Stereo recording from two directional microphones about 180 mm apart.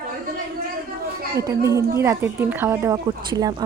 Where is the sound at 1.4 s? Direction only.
20° right (ahead or behind).